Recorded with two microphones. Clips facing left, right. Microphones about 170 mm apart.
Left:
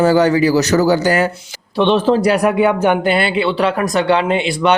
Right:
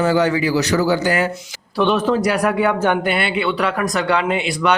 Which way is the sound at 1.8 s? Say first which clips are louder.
Left 4 dB; 25° left (ahead or behind).